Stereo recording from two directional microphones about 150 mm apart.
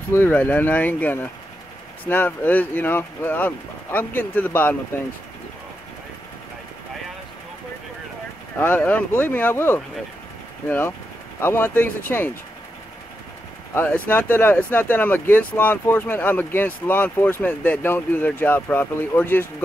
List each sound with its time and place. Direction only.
0.1 s speech: 15° left (ahead or behind)
8.5 s speech: 15° left (ahead or behind)
14.0 s speech: 10° left (ahead or behind)